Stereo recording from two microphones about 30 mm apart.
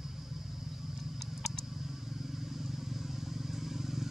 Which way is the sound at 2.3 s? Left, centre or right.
Centre.